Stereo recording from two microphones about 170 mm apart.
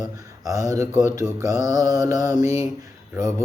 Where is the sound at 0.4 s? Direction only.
20° right (ahead or behind).